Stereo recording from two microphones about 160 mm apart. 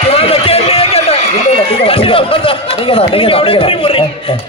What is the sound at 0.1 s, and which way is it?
Run, 35° left (ahead or behind).